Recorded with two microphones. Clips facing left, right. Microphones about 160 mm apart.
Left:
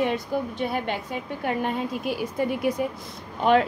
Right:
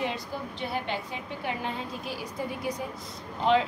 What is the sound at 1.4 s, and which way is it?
A woman's voice, 60° left (ahead or behind).